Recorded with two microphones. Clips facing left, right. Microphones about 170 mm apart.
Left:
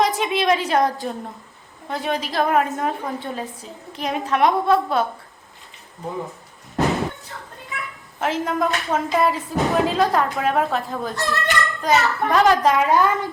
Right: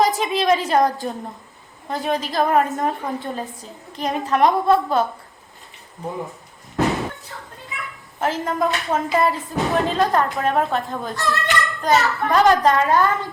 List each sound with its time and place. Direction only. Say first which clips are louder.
0.0 s a woman's voice: right 1 dB; centre (ahead or behind)
8.2 s a woman's voice: even; centre (ahead or behind)
12.8 s a woman's voice: even; 20° left (ahead or behind)